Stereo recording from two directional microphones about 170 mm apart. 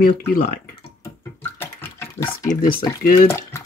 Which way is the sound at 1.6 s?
15° left (ahead or behind).